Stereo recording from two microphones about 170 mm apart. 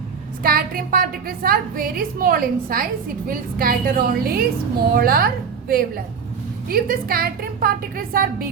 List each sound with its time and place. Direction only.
0.4 s a woman's voice: 60° right (ahead or behind)